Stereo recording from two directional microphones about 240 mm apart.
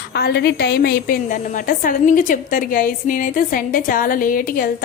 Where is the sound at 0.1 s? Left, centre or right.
Left.